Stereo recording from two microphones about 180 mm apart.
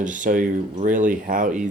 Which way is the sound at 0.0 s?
45° right (ahead or behind).